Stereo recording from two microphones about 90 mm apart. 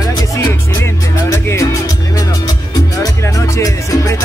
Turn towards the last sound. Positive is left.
turn(degrees=35)  # may be behind; listen again after turning